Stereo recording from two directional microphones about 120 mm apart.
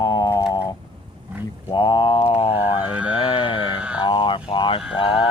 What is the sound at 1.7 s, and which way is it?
Mantra, 40° left (ahead or behind).